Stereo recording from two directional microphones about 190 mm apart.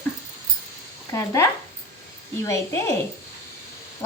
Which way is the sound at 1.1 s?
15° left (ahead or behind).